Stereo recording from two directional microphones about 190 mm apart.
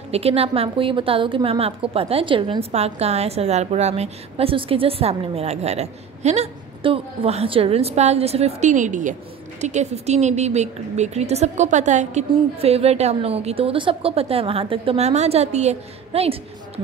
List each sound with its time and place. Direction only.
0.1 s a woman's voice: 30° right (ahead or behind)